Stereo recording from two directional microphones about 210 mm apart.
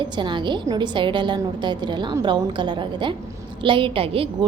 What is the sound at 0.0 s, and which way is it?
A woman's voice, 20° right (ahead or behind).